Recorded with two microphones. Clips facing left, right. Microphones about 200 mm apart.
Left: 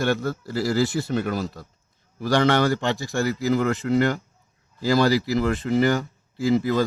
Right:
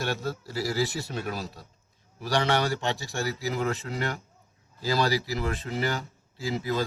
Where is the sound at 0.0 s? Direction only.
55° left (ahead or behind).